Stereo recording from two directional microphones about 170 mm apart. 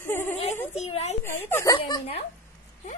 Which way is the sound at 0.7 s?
40° left (ahead or behind).